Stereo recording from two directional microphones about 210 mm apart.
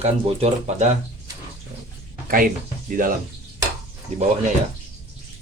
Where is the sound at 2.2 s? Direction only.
40° right (ahead or behind).